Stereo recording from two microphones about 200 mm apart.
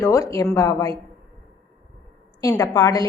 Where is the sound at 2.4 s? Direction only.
15° left (ahead or behind).